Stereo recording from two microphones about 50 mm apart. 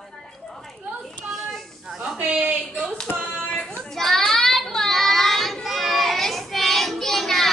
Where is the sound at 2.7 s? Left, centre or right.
Centre.